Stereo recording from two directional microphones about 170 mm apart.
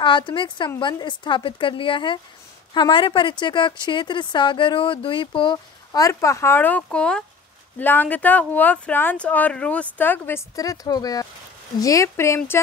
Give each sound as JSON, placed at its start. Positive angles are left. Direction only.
{"t": 0.0, "sound": "a woman's voice", "side_deg": 30}